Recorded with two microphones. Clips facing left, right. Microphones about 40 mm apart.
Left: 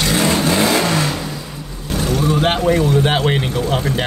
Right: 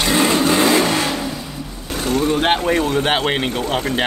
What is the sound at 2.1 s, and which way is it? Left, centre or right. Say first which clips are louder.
Speech: right 1 dB; right.